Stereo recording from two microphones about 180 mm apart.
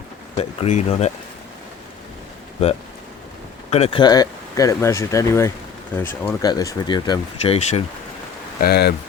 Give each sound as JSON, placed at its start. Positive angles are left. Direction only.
{"t": 0.3, "sound": "speech", "side_deg": 35}
{"t": 3.7, "sound": "speech", "side_deg": 35}
{"t": 8.6, "sound": "speech", "side_deg": 65}